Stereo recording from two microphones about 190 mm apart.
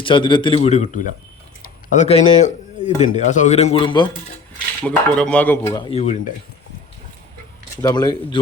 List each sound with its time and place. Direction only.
0.0 s a man's voice: 25° left (ahead or behind)
4.8 s speech: 5° left (ahead or behind)
5.7 s speech: 30° left (ahead or behind)
7.8 s a man's voice: 20° left (ahead or behind)